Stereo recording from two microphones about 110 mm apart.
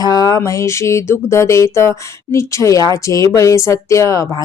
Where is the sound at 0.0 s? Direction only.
35° left (ahead or behind).